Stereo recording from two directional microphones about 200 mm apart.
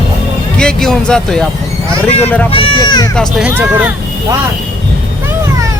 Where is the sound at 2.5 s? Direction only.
25° left (ahead or behind).